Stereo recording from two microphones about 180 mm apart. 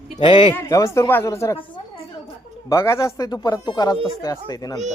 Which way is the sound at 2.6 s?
15° left (ahead or behind).